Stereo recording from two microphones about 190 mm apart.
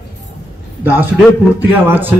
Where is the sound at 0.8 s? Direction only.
10° right (ahead or behind).